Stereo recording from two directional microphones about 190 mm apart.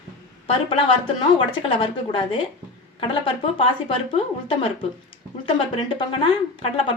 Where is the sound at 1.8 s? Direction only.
25° left (ahead or behind).